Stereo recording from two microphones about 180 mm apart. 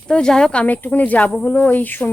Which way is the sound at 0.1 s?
5° left (ahead or behind).